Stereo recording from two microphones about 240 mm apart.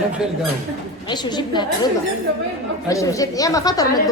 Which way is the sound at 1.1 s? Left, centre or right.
Centre.